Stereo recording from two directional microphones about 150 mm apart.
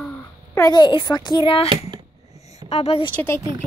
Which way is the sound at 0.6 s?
30° left (ahead or behind).